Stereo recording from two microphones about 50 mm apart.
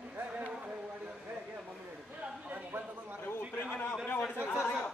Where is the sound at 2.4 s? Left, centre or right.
Right.